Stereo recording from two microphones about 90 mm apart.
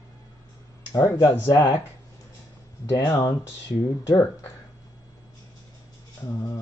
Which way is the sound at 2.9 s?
45° left (ahead or behind).